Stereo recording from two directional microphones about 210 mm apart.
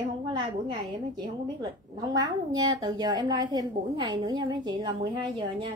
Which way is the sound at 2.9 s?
20° right (ahead or behind).